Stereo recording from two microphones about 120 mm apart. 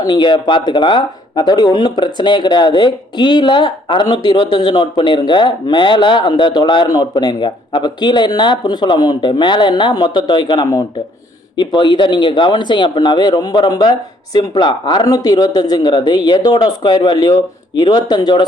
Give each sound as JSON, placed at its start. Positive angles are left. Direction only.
{"t": 0.0, "sound": "speech", "side_deg": 35}